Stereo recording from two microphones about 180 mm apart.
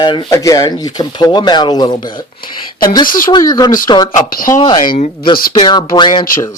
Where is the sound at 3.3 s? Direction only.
20° left (ahead or behind).